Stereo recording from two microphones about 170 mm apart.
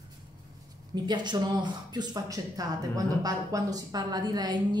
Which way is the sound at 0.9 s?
25° right (ahead or behind).